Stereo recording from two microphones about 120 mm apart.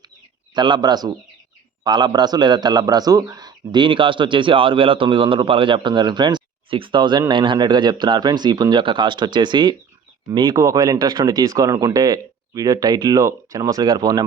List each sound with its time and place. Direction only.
0.5 s a man's voice: 40° right (ahead or behind)
10.6 s speech: 25° right (ahead or behind)